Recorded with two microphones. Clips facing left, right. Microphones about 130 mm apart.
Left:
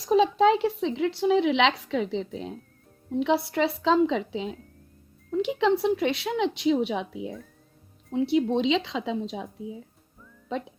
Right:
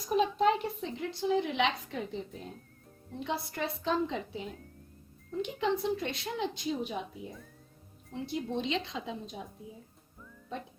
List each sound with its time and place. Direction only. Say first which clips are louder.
0.0 s speech: left 7 dB; 90° left
3.2 s a woman's voice: left 11 dB; 75° left (ahead or behind)
8.1 s speech: left 11 dB; 75° left (ahead or behind); by 9.5 s 90° left